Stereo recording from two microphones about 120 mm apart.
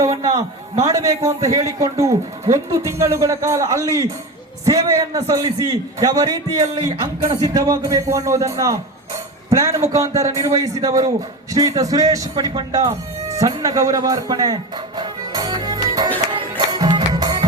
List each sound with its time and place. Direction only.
0.2 s a sound: 30° right (ahead or behind)
0.9 s a man's voice: 25° right (ahead or behind)
16.3 s music: 35° right (ahead or behind)